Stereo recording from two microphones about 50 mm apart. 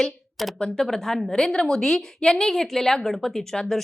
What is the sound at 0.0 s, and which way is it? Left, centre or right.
A woman's voice, centre.